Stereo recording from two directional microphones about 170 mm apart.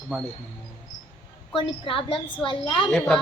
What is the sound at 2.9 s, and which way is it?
Speech, 5° left (ahead or behind).